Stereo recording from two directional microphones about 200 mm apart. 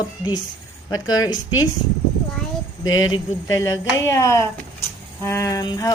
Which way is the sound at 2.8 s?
90° left.